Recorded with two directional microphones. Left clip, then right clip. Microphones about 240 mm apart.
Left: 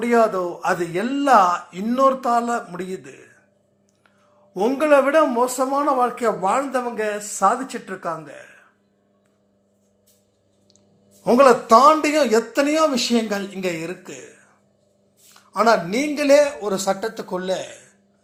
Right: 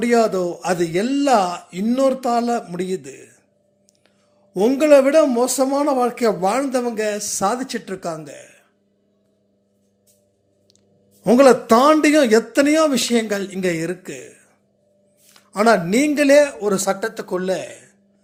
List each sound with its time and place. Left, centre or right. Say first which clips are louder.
0.0 s speech: right 1 dB; right
4.5 s speech: right 3 dB; right
11.2 s speech: right 1 dB; right